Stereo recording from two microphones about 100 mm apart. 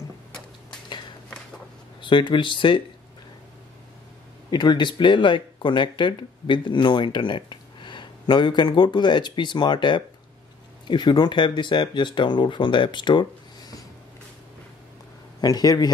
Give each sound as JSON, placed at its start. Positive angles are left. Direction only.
{"t": 2.0, "sound": "speech", "side_deg": 50}
{"t": 4.5, "sound": "speech", "side_deg": 50}
{"t": 15.4, "sound": "speech", "side_deg": 40}